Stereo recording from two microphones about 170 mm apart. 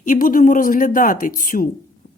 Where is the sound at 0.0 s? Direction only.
55° left (ahead or behind).